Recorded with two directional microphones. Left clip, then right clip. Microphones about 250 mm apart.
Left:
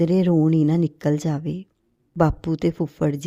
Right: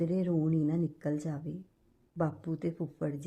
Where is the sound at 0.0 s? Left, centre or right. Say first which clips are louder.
Left 13 dB; left.